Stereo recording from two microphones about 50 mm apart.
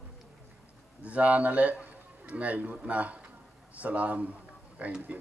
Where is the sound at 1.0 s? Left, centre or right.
Right.